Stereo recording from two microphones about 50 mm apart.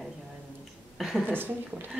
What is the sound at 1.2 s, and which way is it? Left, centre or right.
Speech, right.